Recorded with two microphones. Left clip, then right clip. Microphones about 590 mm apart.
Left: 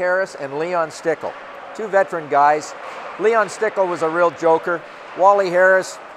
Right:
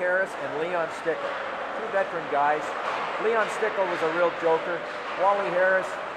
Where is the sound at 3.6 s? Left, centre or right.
Left.